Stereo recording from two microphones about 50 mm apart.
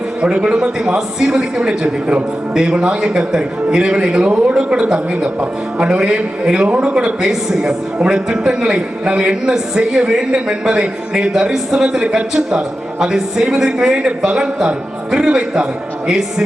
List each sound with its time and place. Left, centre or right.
0.2 s a man's voice: right
0.5 s a man's voice: centre